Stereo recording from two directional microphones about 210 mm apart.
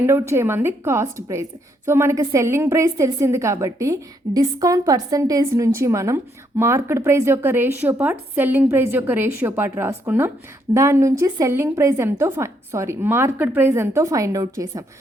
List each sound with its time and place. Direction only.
0.0 s a woman's voice: 10° right (ahead or behind)